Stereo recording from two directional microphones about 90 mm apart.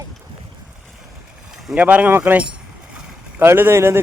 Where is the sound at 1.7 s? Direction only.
15° right (ahead or behind).